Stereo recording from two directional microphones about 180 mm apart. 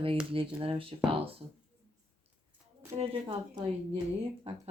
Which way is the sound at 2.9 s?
30° right (ahead or behind).